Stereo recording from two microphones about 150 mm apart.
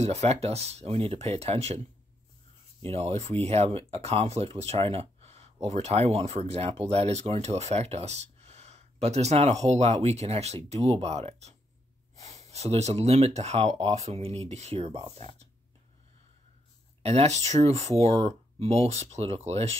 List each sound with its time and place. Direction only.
0.0 s speech: 45° right (ahead or behind)
2.9 s speech: 45° right (ahead or behind)
17.0 s speech: 45° right (ahead or behind)